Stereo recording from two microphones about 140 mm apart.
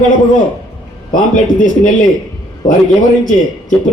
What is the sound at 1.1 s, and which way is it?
Speech, 65° left (ahead or behind).